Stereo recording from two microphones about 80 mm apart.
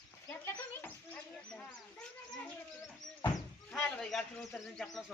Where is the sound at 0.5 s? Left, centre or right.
Left.